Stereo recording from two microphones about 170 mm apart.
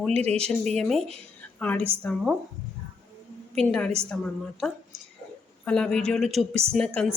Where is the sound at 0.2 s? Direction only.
40° right (ahead or behind).